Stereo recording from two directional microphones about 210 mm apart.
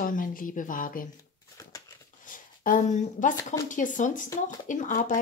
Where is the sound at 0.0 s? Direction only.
40° left (ahead or behind).